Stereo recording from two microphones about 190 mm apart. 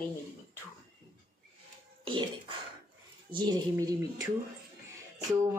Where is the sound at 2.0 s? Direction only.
25° right (ahead or behind).